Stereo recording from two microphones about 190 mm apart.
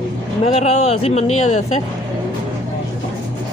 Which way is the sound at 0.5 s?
35° left (ahead or behind).